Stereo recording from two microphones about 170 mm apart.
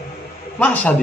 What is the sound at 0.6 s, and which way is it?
Speech, 10° left (ahead or behind).